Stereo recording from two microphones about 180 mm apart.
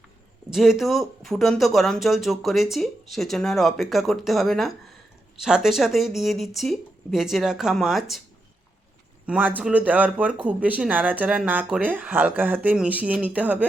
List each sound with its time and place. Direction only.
0.5 s speech: centre (ahead or behind)
9.2 s speech: 10° right (ahead or behind)